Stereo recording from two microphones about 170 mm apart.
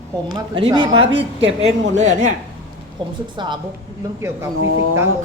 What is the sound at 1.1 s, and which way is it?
Speech, 90° right.